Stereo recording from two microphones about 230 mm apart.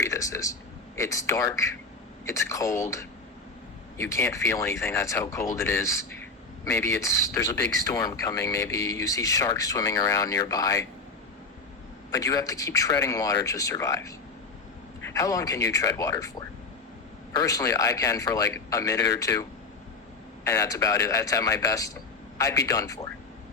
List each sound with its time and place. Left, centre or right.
0.0 s a sound: centre
0.9 s speech: centre
4.1 s speech: centre
12.1 s speech: centre
17.3 s speech: centre